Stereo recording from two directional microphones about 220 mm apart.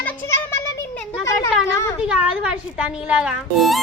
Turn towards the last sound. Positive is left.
turn(degrees=0)  # may be behind; listen again after turning